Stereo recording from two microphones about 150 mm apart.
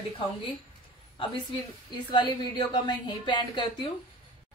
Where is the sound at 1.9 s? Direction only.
30° left (ahead or behind).